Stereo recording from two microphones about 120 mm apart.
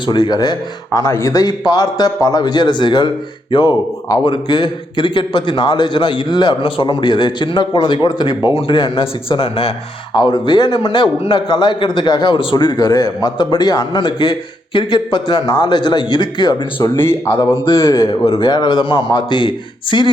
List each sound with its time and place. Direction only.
0.0 s a man's voice: 35° left (ahead or behind)
10.2 s a man's voice: 40° left (ahead or behind)
17.0 s speech: 20° left (ahead or behind)
18.1 s a man's voice: 45° left (ahead or behind)